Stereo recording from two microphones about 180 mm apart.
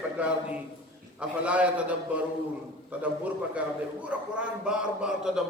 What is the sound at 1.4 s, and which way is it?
Speech, 5° right (ahead or behind).